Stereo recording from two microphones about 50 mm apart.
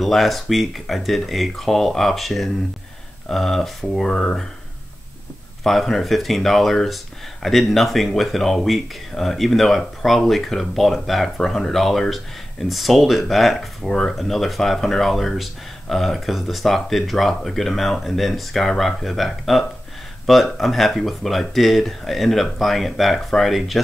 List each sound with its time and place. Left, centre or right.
0.0 s speech: centre
5.6 s speech: centre
13.8 s speech: centre